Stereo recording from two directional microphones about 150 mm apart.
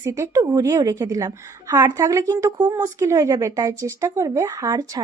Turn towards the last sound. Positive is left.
turn(degrees=-25)  # may be behind; listen again after turning